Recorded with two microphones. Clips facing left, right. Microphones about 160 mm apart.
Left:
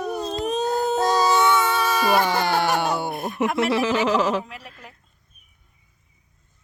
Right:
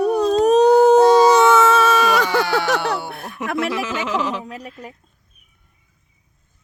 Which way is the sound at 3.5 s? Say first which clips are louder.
Even; 30° left (ahead or behind).